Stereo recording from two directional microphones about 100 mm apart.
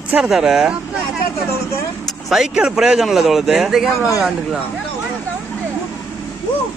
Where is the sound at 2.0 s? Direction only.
5° right (ahead or behind).